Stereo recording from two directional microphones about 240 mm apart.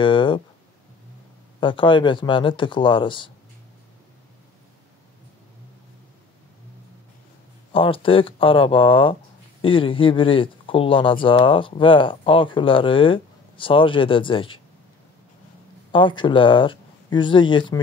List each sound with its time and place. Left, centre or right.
0.0 s speech: left
1.6 s speech: left
7.7 s speech: left
15.9 s speech: centre